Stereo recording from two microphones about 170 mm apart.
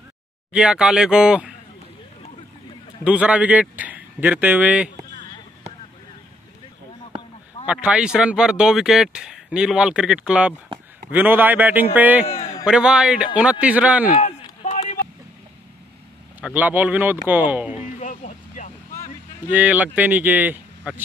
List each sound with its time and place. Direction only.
0.5 s speech: 5° right (ahead or behind)
3.0 s a man's voice: 5° right (ahead or behind)
7.6 s speech: 5° right (ahead or behind)
14.6 s vehicle: 40° left (ahead or behind)
16.3 s speech: 10° right (ahead or behind)
17.8 s vehicle: 45° left (ahead or behind)
19.5 s speech: 10° right (ahead or behind)